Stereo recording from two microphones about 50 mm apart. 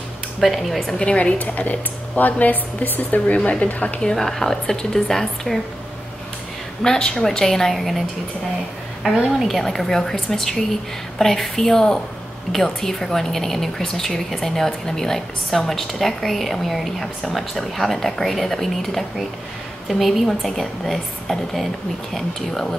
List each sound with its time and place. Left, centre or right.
0.4 s a woman's voice: centre
1.0 s a woman's voice: left
4.0 s a woman's voice: centre
6.8 s a woman's voice: centre
9.0 s a woman's voice: centre